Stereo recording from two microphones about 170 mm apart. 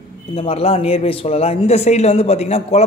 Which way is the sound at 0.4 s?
35° left (ahead or behind).